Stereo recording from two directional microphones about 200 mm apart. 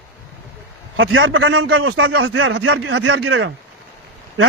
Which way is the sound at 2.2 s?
75° right (ahead or behind).